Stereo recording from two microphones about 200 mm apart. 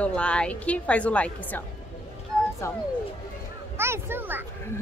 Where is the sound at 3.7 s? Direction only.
10° right (ahead or behind).